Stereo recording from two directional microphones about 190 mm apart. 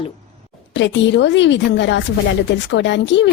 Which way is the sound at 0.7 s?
70° left (ahead or behind).